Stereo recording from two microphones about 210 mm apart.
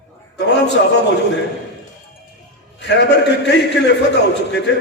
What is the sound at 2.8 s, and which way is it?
A man's voice, 55° left (ahead or behind).